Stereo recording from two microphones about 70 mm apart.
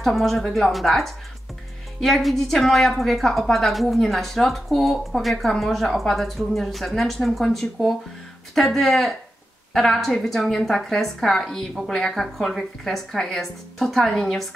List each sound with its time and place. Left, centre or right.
0.0 s a woman's voice: centre